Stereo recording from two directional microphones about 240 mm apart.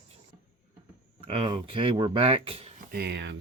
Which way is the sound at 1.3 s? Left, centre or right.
Right.